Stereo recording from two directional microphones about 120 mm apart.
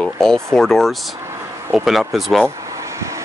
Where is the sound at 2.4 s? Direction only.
25° right (ahead or behind).